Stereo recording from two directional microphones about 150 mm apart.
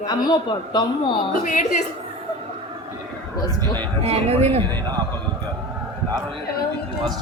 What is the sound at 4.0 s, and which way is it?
Speech, 40° right (ahead or behind).